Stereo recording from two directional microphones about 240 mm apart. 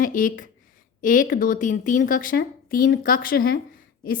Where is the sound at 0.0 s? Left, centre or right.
Left.